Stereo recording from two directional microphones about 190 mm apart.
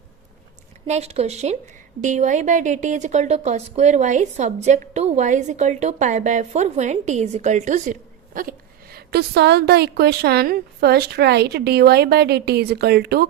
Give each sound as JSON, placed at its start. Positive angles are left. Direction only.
{"t": 0.9, "sound": "a woman's voice", "side_deg": -35}